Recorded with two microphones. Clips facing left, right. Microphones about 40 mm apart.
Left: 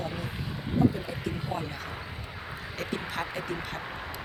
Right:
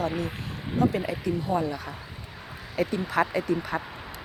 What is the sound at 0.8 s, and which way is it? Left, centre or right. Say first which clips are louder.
Speech: right 1 dB; right.